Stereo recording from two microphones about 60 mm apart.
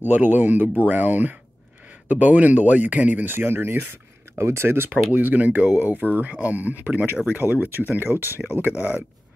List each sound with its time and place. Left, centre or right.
0.0 s speech: right
3.3 s speech: right